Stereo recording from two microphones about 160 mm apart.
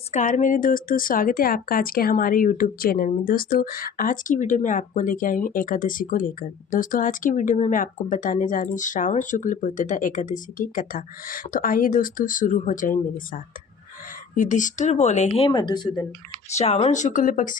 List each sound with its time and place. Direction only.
0.1 s speech: 50° left (ahead or behind); by 15.9 s 25° left (ahead or behind)
16.6 s speech: 40° left (ahead or behind)